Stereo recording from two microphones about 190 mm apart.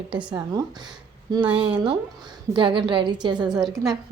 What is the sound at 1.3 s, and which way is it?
A woman's voice, 25° right (ahead or behind).